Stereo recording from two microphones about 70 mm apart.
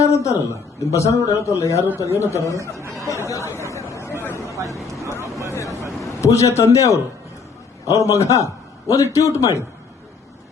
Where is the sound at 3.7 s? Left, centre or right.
Left.